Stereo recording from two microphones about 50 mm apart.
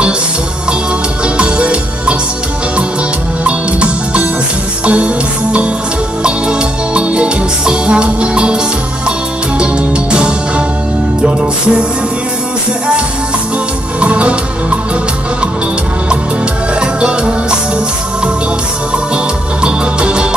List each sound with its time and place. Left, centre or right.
1.2 s music: right
3.4 s music: right
13.9 s music: right
16.8 s music: right
19.6 s music: centre